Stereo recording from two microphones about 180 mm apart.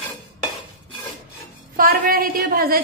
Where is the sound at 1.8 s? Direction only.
50° right (ahead or behind).